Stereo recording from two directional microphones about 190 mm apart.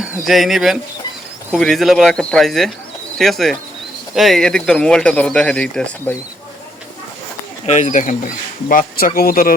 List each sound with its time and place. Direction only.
0.0 s speech: centre (ahead or behind)
7.6 s speech: 35° left (ahead or behind)